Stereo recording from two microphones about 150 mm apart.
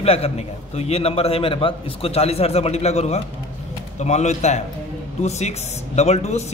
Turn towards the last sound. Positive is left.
turn(degrees=45)  # may be behind; listen again after turning